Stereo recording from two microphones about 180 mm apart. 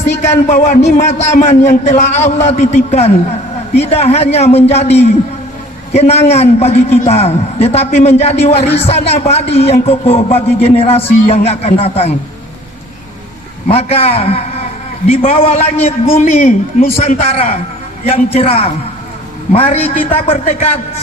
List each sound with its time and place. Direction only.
0.3 s a man's voice: 40° left (ahead or behind)
13.7 s a man's voice: 35° left (ahead or behind)